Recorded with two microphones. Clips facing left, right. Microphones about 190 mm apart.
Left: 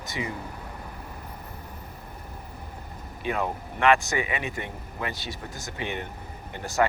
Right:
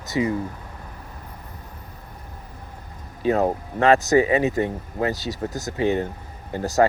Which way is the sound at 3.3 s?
35° right (ahead or behind).